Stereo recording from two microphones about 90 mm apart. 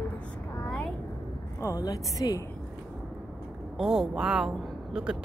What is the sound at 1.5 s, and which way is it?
Speech, 30° left (ahead or behind).